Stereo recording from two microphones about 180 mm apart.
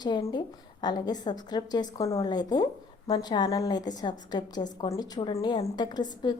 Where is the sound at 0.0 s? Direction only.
20° left (ahead or behind).